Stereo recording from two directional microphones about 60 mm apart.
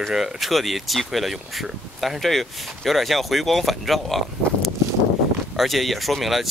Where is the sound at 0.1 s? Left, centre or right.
Centre.